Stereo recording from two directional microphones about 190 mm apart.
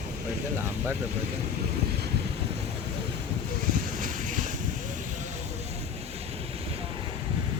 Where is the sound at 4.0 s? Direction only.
45° right (ahead or behind).